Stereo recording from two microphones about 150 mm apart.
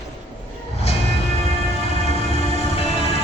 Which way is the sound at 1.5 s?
40° left (ahead or behind).